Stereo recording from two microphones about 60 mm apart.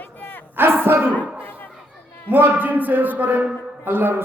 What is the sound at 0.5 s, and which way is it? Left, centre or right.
Battle cry, right.